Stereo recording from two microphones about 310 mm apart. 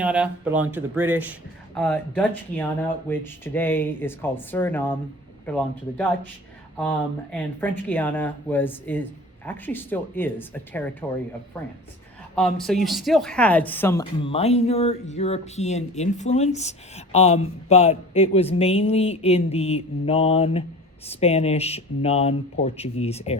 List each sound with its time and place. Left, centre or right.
0.0 s speech: centre
6.7 s speech: centre
12.4 s speech: centre